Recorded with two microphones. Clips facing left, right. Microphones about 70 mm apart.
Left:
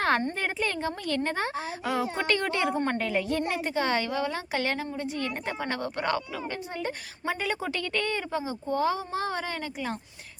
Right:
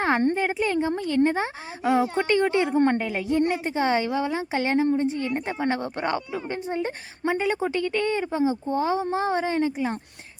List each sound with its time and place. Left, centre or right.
0.3 s a woman's voice: centre